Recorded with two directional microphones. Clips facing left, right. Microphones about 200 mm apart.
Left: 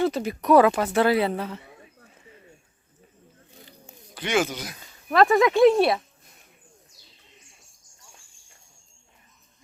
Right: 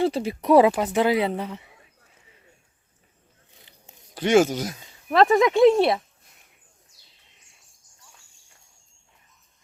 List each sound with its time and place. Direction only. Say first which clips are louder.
0.0 s speech: right 1 dB; 30° right (ahead or behind)
4.1 s speech: right 7 dB; 45° right (ahead or behind)
5.1 s speech: right 1 dB; 20° right (ahead or behind)